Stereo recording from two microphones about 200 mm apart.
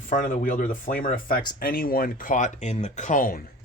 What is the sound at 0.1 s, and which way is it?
Speech, 40° left (ahead or behind).